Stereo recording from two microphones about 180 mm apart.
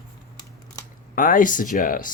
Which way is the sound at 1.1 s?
50° left (ahead or behind).